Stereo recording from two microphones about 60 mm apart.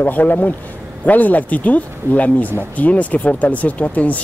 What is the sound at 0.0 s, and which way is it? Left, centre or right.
Speech, left.